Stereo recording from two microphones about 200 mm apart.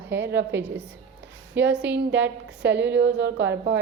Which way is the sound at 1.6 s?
10° right (ahead or behind).